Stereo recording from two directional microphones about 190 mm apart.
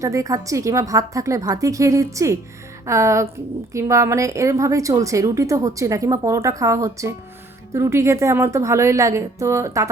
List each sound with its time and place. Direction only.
0.0 s a woman's voice: 15° right (ahead or behind)